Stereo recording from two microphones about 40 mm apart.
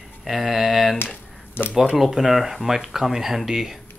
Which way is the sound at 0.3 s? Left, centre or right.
Centre.